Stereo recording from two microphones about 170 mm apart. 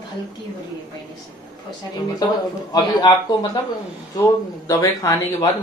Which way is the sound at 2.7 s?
25° left (ahead or behind).